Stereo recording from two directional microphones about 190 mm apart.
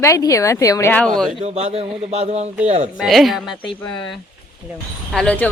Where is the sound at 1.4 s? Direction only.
35° right (ahead or behind).